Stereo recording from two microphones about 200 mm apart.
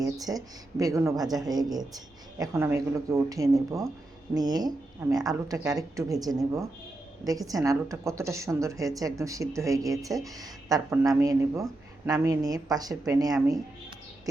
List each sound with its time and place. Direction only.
0.0 s a woman's voice: 20° right (ahead or behind)